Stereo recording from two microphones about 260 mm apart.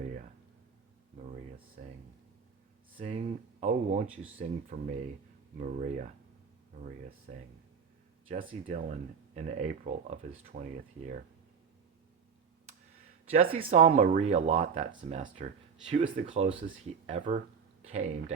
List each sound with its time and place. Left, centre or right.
1.1 s speech: right
3.0 s speech: right
4.0 s speech: centre
4.4 s speech: right
8.3 s speech: right
13.3 s speech: right